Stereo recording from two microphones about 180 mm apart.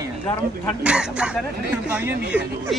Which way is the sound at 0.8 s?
5° right (ahead or behind).